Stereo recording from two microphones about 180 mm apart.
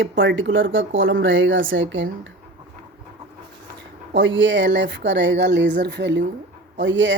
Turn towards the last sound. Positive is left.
turn(degrees=-90)